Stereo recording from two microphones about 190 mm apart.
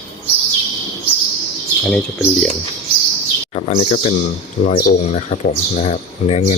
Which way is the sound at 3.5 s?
35° left (ahead or behind).